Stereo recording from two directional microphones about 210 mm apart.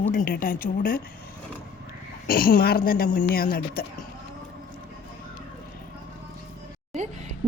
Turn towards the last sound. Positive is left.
turn(degrees=-35)  # may be behind; listen again after turning